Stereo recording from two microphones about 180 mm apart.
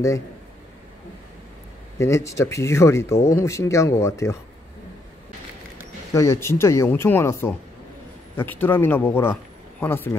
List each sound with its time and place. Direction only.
2.0 s speech: 15° left (ahead or behind)
6.1 s speech: 15° left (ahead or behind)